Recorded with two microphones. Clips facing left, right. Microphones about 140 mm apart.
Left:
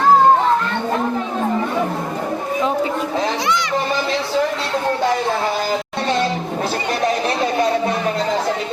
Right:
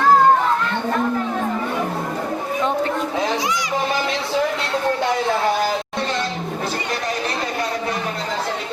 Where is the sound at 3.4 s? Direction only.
65° left (ahead or behind).